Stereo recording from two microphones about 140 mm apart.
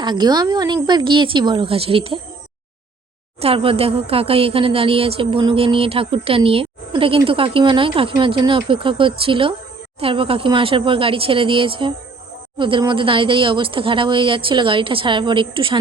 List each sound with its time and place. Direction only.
0.0 s a woman's voice: 30° right (ahead or behind)
3.4 s a woman's voice: 40° right (ahead or behind)